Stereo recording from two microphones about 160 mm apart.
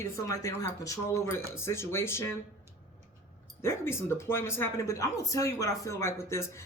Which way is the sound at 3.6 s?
15° left (ahead or behind).